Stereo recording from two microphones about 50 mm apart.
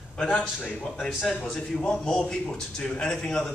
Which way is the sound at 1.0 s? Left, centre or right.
Centre.